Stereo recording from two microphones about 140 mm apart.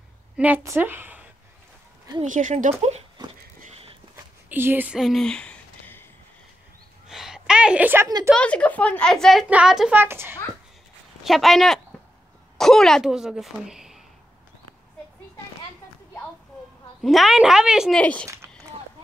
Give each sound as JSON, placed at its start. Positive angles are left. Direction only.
{"t": 0.4, "sound": "a woman's voice", "side_deg": -10}
{"t": 2.2, "sound": "speech", "side_deg": -65}
{"t": 4.5, "sound": "a sound", "side_deg": -15}
{"t": 7.1, "sound": "a sound", "side_deg": -5}
{"t": 8.3, "sound": "a woman's voice", "side_deg": 10}
{"t": 9.9, "sound": "speech", "side_deg": -15}
{"t": 11.2, "sound": "a woman's voice", "side_deg": 0}
{"t": 17.0, "sound": "a woman's voice", "side_deg": 0}
{"t": 18.3, "sound": "walk", "side_deg": -20}